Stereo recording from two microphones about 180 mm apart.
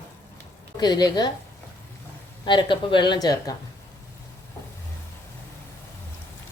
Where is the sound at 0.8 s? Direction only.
20° left (ahead or behind).